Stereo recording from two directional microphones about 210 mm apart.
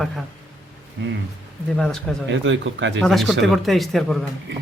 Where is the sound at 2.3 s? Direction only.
60° right (ahead or behind).